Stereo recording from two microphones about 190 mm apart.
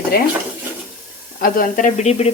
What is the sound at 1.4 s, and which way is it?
Speech, 45° left (ahead or behind).